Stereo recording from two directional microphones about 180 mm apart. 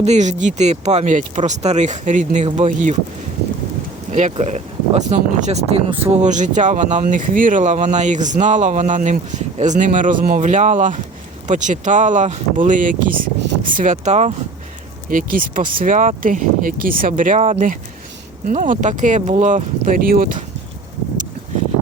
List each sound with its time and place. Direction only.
0.0 s speech: 40° right (ahead or behind)
4.1 s speech: 40° right (ahead or behind)
15.1 s speech: 50° right (ahead or behind)